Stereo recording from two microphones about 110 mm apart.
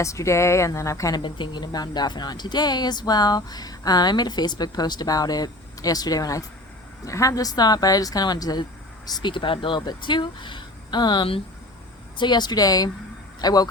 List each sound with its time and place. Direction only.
0.0 s speech: 30° left (ahead or behind)
1.2 s speech: 45° left (ahead or behind)